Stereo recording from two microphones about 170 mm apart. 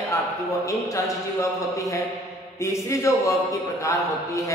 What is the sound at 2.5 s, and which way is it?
A man's voice, 15° left (ahead or behind).